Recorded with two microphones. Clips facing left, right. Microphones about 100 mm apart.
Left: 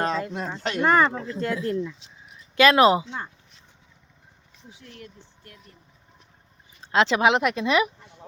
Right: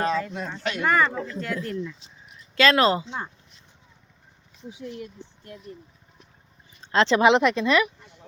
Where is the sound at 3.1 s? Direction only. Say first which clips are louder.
Right 1 dB; 15° right (ahead or behind).